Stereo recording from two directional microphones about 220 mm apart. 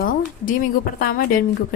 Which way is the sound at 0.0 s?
40° left (ahead or behind).